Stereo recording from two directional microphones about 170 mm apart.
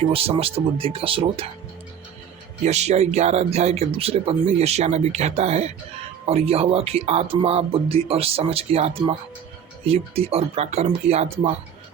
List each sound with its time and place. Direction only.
0.1 s speech: 35° right (ahead or behind)
2.6 s speech: 40° right (ahead or behind)